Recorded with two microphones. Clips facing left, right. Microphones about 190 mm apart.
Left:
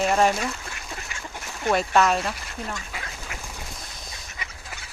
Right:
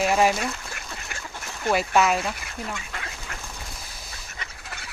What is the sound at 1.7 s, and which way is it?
Speech, 5° right (ahead or behind).